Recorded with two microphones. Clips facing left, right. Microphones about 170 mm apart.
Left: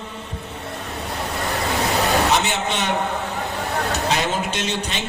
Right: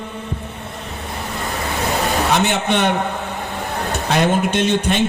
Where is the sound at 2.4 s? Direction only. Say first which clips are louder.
Right 5 dB; 55° right (ahead or behind).